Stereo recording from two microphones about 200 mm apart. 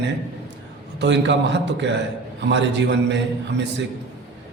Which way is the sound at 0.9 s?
60° right (ahead or behind).